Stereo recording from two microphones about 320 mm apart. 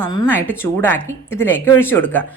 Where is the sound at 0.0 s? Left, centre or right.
Centre.